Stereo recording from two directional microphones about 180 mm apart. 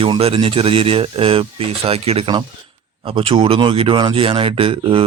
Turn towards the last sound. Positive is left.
turn(degrees=-30)  # may be behind; listen again after turning